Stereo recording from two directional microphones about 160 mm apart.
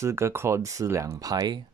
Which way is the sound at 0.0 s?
15° right (ahead or behind).